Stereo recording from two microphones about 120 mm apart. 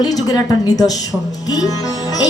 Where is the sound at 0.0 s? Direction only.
30° left (ahead or behind).